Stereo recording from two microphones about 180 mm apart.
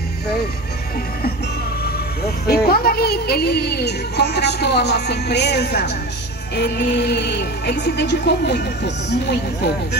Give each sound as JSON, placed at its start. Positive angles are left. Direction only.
{"t": 2.4, "sound": "speech", "side_deg": 60}
{"t": 6.5, "sound": "music", "side_deg": 70}